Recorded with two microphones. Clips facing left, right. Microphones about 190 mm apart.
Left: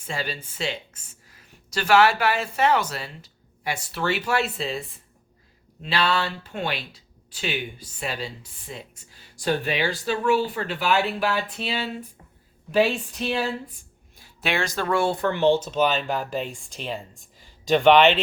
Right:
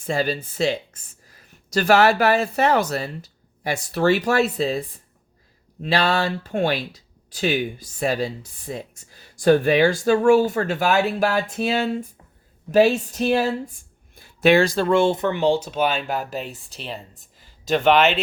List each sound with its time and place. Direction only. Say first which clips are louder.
0.0 s speech: right 8 dB; 40° right (ahead or behind); by 16.7 s 5° right (ahead or behind)
16.7 s speech: left 3 dB; 40° right (ahead or behind)
17.9 s speech: left 1 dB; 5° right (ahead or behind)